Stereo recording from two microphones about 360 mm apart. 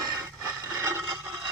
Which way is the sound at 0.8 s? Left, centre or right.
Centre.